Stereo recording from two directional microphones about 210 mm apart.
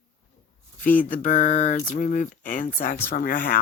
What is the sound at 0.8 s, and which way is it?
Speech, 40° left (ahead or behind).